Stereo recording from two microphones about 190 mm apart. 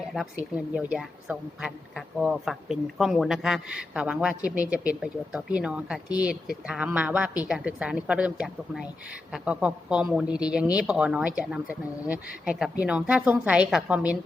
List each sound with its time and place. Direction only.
0.1 s a woman's voice: 5° right (ahead or behind)